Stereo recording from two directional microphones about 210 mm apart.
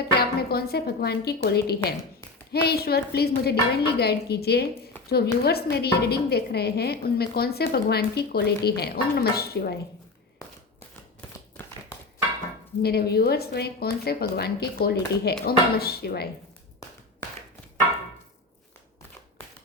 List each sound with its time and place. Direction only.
0.2 s a woman's voice: 50° left (ahead or behind)
12.8 s a woman's voice: 50° left (ahead or behind)